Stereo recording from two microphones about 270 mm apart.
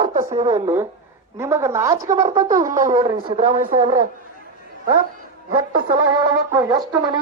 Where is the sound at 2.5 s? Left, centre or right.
Right.